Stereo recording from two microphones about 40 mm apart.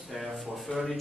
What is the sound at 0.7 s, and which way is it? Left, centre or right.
Speech, left.